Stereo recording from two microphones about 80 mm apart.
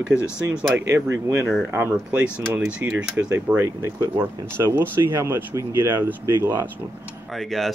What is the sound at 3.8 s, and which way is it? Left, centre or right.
Speech, right.